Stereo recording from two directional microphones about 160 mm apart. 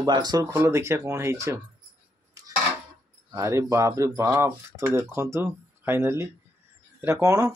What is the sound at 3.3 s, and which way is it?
Speech, 15° right (ahead or behind).